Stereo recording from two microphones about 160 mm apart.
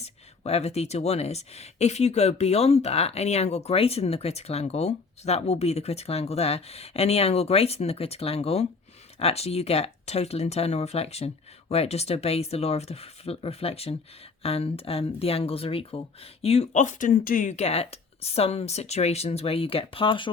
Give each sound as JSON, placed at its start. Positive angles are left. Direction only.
{"t": 0.0, "sound": "speech", "side_deg": 40}